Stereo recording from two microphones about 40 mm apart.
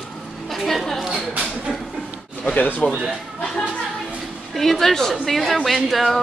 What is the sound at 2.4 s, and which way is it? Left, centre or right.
Speech, left.